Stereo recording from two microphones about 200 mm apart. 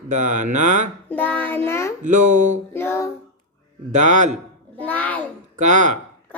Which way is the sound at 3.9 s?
35° right (ahead or behind).